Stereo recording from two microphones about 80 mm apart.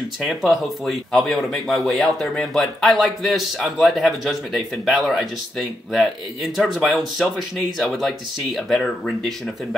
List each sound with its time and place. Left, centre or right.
0.2 s speech: centre